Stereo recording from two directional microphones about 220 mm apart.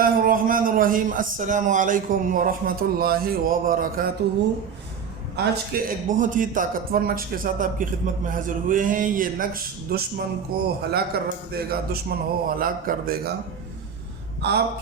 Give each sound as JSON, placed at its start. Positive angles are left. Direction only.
{"t": 0.0, "sound": "a man's voice", "side_deg": -40}
{"t": 5.4, "sound": "a man's voice", "side_deg": -40}